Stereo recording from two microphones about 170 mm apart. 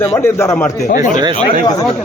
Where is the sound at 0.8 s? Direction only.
60° left (ahead or behind).